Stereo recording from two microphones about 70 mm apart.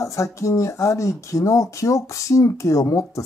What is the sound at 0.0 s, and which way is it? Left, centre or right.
Speech, left.